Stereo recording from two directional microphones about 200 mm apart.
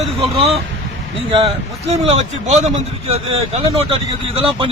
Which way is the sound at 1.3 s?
30° right (ahead or behind).